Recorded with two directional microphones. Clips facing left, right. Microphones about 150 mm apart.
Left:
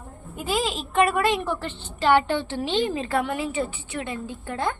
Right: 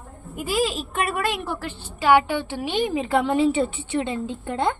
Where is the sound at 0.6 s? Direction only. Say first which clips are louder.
Left 5 dB; centre (ahead or behind); by 4.8 s 20° right (ahead or behind).